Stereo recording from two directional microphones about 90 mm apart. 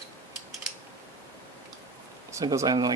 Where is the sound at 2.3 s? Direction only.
40° right (ahead or behind).